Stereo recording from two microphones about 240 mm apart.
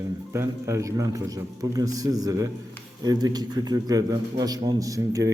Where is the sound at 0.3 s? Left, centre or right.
Centre.